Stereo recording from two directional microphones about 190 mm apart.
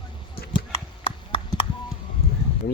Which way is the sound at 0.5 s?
30° left (ahead or behind).